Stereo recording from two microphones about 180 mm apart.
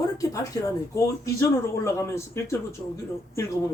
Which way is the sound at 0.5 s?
20° left (ahead or behind).